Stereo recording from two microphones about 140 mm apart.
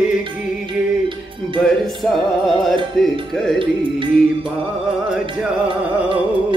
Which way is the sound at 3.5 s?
35° right (ahead or behind).